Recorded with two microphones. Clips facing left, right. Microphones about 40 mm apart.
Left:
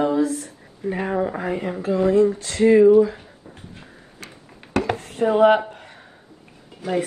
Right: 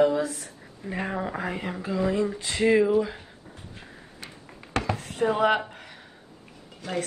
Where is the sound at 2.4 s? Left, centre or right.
Right.